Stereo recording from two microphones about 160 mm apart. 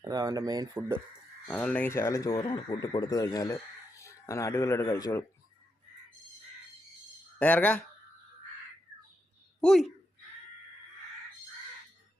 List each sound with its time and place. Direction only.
0.0 s speech: 20° right (ahead or behind)
1.5 s speech: 5° left (ahead or behind)
7.3 s speech: 10° left (ahead or behind)
9.6 s speech: centre (ahead or behind)